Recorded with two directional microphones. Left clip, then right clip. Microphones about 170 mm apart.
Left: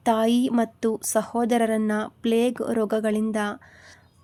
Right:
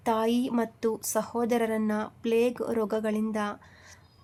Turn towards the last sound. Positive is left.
turn(degrees=35)  # may be behind; listen again after turning